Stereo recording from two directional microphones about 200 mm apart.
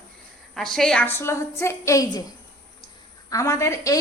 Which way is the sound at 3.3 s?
15° left (ahead or behind).